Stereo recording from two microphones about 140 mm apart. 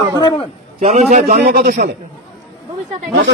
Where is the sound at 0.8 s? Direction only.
55° right (ahead or behind); by 1.9 s 90° right.